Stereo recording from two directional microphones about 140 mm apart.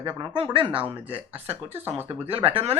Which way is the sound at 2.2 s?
45° right (ahead or behind).